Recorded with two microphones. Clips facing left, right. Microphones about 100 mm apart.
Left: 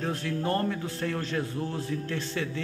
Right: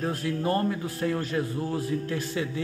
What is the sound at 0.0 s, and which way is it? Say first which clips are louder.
A man's voice: right 2 dB; 5° right (ahead or behind).